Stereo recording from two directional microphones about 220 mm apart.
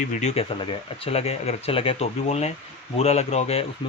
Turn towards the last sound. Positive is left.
turn(degrees=30)  # may be behind; listen again after turning